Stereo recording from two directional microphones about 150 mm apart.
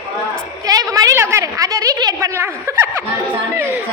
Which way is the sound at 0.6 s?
25° right (ahead or behind).